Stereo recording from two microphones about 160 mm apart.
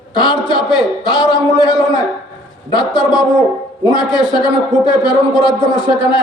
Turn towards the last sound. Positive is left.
turn(degrees=30)  # may be behind; listen again after turning